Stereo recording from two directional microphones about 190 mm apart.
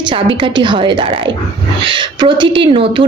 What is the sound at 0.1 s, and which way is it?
Speech, 25° right (ahead or behind).